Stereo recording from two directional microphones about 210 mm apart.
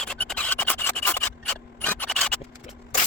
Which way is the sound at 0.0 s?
5° left (ahead or behind).